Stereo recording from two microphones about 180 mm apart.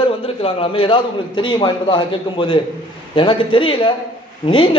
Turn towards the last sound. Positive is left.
turn(degrees=30)  # may be behind; listen again after turning